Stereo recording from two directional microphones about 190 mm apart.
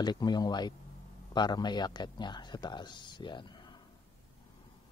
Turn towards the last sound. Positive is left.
turn(degrees=25)  # may be behind; listen again after turning